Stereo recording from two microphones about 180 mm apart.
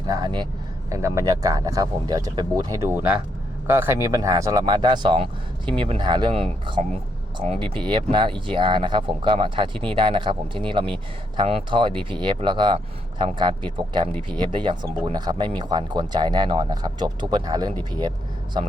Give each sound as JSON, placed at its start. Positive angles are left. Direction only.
{"t": 0.1, "sound": "speech", "side_deg": -25}